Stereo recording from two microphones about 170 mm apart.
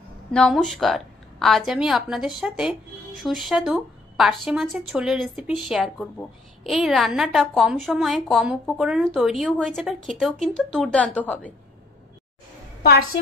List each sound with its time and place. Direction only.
0.3 s a woman's voice: 5° left (ahead or behind)
12.8 s a woman's voice: 60° left (ahead or behind)